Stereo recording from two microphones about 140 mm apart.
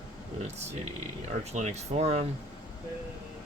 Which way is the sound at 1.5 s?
55° right (ahead or behind).